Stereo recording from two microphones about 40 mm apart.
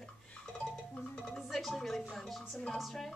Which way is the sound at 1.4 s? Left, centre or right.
Centre.